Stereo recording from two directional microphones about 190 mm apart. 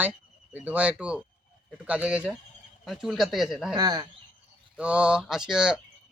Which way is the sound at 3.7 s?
20° right (ahead or behind).